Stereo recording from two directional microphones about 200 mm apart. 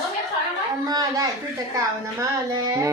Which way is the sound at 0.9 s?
20° right (ahead or behind).